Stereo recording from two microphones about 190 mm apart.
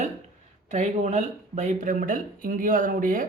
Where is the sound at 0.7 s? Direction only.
40° right (ahead or behind).